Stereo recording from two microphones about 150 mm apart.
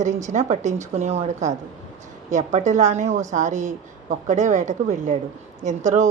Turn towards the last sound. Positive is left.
turn(degrees=-55)  # may be behind; listen again after turning